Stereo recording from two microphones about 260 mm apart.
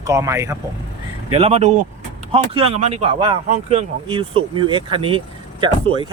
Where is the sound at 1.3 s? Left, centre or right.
Right.